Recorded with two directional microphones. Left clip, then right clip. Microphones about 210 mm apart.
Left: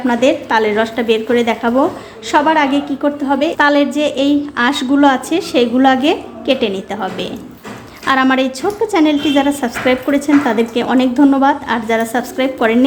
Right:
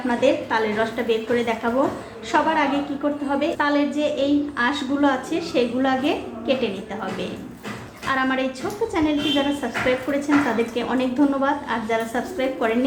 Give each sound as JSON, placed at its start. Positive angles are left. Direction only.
{"t": 0.1, "sound": "a woman's voice", "side_deg": 50}